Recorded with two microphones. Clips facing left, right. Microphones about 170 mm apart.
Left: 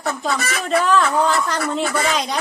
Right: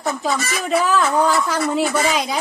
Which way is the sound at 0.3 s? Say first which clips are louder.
Even; 60° left (ahead or behind).